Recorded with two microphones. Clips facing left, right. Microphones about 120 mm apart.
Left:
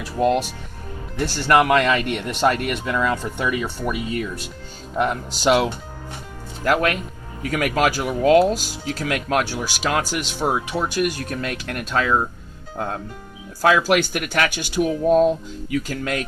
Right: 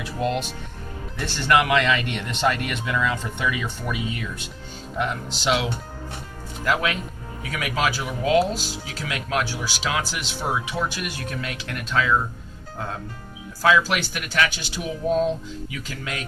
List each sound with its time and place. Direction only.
0.0 s speech: 45° left (ahead or behind)
13.6 s speech: 45° left (ahead or behind)